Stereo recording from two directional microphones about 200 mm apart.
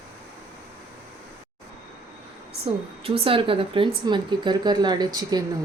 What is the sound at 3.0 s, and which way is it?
Speech, 30° right (ahead or behind).